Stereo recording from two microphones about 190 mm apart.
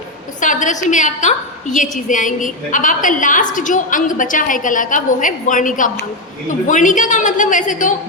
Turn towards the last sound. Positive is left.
turn(degrees=40)  # may be behind; listen again after turning